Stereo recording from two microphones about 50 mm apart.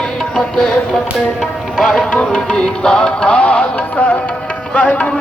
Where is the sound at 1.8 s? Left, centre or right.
Centre.